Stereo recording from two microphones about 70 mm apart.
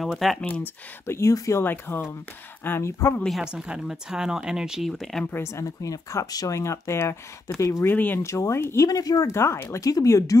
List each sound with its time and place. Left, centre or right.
0.0 s speech: centre
1.0 s speech: left
1.3 s speech: left
1.6 s speech: left
3.3 s speech: centre
5.2 s speech: left
5.5 s speech: left
6.6 s speech: left
7.8 s speech: left
8.2 s speech: left
8.8 s speech: left
9.3 s speech: left